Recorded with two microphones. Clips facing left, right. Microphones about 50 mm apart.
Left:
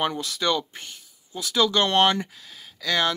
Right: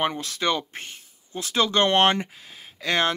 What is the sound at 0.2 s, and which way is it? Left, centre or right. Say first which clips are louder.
Speech: even; right.